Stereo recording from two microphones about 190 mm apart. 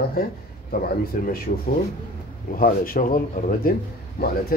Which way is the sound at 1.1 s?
45° left (ahead or behind).